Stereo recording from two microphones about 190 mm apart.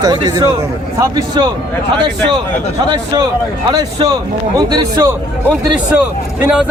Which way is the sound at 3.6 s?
20° right (ahead or behind).